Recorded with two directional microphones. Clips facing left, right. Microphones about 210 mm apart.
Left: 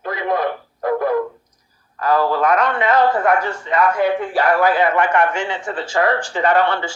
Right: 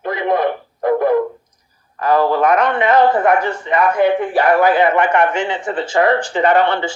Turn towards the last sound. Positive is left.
turn(degrees=-20)  # may be behind; listen again after turning